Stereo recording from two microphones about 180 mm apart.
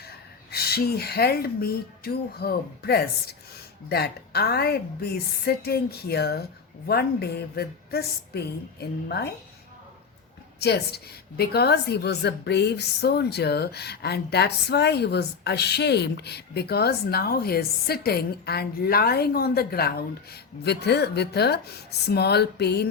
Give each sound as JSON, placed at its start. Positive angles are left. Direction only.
{"t": 0.5, "sound": "a woman's voice", "side_deg": 60}
{"t": 10.6, "sound": "a woman's voice", "side_deg": 65}